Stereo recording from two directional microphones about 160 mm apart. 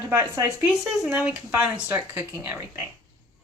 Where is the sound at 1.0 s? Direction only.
5° right (ahead or behind).